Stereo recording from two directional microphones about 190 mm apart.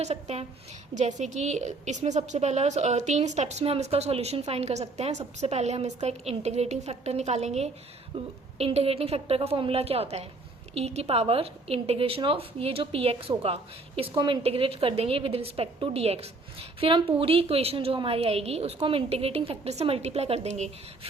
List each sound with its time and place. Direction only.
0.0 s a woman's voice: 35° right (ahead or behind)